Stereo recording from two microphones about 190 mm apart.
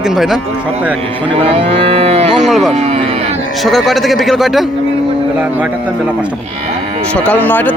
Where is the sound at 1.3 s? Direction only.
30° right (ahead or behind).